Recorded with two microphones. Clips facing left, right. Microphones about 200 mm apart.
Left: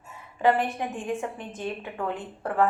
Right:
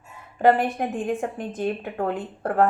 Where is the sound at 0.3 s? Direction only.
55° right (ahead or behind).